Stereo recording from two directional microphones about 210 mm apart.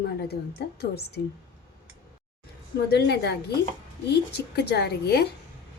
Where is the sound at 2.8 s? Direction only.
50° left (ahead or behind).